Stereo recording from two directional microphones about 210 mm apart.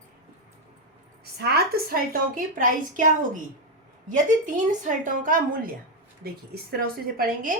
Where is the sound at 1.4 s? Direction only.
50° right (ahead or behind).